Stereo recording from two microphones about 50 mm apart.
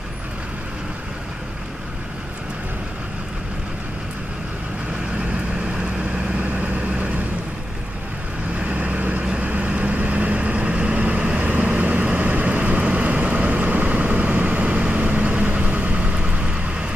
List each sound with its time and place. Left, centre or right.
6.3 s vehicle: right
8.5 s vehicle: right